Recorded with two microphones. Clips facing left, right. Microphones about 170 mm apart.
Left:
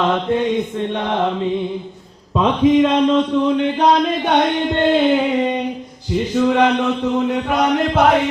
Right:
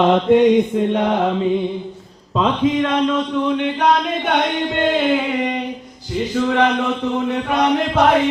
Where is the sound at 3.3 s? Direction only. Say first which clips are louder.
Left 3 dB; 30° left (ahead or behind).